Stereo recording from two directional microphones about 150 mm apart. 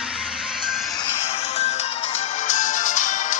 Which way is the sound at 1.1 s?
45° left (ahead or behind).